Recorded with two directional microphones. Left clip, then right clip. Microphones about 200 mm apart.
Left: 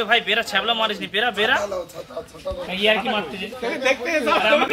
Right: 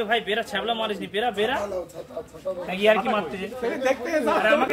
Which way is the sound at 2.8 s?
5° right (ahead or behind).